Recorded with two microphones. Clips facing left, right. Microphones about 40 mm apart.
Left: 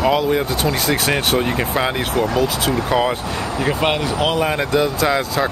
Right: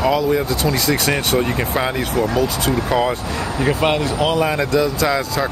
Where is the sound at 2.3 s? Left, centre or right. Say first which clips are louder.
Even; centre.